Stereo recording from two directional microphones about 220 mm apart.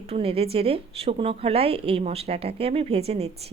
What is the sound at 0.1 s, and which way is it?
Speech, 25° right (ahead or behind).